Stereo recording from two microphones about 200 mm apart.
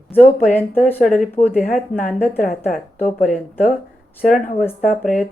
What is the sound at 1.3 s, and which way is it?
Speech, 10° left (ahead or behind).